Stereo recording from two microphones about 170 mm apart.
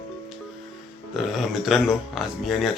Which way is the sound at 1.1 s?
Centre (ahead or behind).